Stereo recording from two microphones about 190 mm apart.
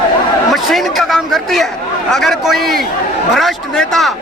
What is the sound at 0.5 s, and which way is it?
Speech, centre (ahead or behind).